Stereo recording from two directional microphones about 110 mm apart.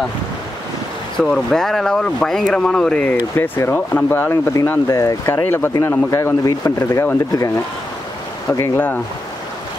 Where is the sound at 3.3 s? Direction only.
25° left (ahead or behind).